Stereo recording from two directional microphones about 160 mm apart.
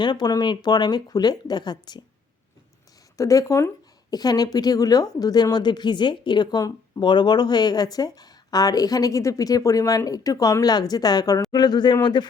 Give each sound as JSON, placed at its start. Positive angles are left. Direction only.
{"t": 0.0, "sound": "a woman's voice", "side_deg": 25}
{"t": 3.2, "sound": "a woman's voice", "side_deg": 20}